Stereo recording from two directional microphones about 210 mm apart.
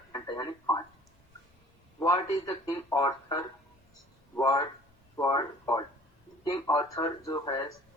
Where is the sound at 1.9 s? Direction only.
15° left (ahead or behind).